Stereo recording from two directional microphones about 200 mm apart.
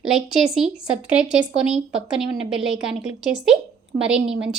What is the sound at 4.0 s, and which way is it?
Speech, 5° right (ahead or behind).